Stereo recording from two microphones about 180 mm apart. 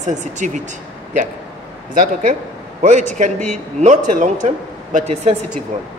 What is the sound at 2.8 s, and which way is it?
Speech, 40° right (ahead or behind).